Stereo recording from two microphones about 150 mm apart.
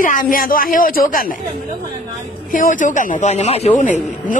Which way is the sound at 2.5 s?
60° left (ahead or behind).